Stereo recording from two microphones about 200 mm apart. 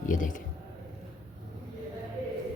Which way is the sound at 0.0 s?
40° left (ahead or behind).